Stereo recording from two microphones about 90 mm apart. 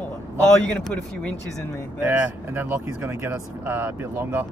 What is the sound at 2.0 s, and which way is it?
Speech, 20° right (ahead or behind).